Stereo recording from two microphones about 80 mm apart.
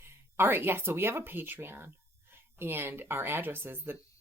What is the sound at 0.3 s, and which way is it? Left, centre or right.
Speech, right.